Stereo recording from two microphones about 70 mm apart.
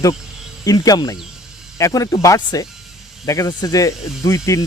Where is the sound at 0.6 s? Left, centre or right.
Left.